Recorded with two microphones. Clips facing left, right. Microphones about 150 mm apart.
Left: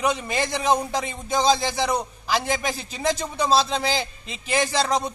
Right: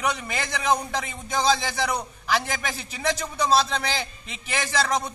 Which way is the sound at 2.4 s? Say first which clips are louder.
Left 5 dB; 30° left (ahead or behind).